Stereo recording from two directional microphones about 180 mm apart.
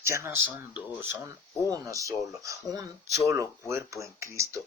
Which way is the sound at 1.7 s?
20° right (ahead or behind).